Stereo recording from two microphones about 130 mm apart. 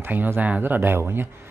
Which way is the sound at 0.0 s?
15° right (ahead or behind).